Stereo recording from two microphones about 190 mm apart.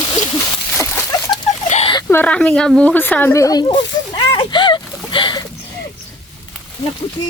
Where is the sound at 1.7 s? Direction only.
30° left (ahead or behind).